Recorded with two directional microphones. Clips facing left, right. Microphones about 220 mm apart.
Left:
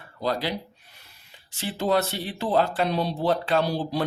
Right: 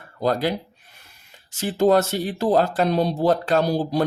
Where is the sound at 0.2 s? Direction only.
45° right (ahead or behind).